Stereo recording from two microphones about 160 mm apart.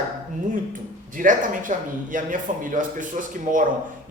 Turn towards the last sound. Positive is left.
turn(degrees=-55)  # may be behind; listen again after turning